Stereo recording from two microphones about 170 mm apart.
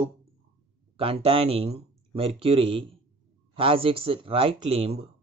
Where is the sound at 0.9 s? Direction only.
35° right (ahead or behind).